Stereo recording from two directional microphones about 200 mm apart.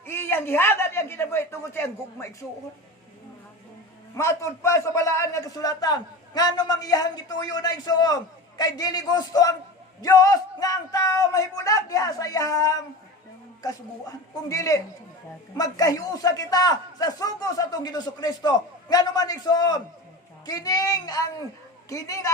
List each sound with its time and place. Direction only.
0.0 s a man's voice: 10° left (ahead or behind)
4.1 s a man's voice: 15° left (ahead or behind)